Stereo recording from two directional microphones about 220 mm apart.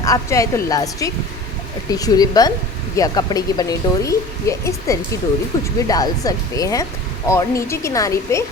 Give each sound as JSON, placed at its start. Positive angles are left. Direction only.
{"t": 0.0, "sound": "speech", "side_deg": 15}